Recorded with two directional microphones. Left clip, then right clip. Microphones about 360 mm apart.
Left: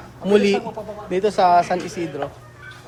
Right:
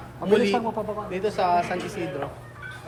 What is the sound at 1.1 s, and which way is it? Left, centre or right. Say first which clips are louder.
Speech: left 8 dB; centre.